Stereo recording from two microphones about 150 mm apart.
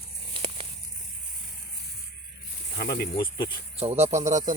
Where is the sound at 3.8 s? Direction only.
40° right (ahead or behind).